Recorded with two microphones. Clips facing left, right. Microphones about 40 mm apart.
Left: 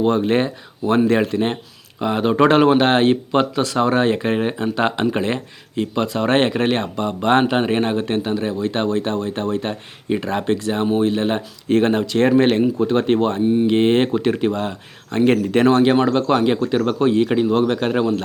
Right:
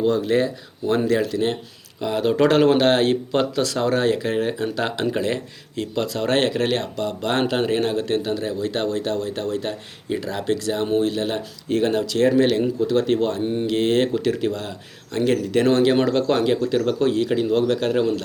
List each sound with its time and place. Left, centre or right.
0.0 s speech: left
16.0 s speech: centre